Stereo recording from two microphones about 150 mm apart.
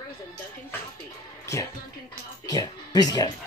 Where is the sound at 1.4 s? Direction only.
20° left (ahead or behind).